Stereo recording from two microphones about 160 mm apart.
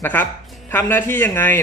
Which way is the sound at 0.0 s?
10° left (ahead or behind).